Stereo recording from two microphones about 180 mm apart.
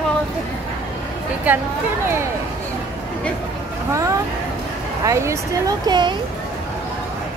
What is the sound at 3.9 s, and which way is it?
Speech, 15° right (ahead or behind).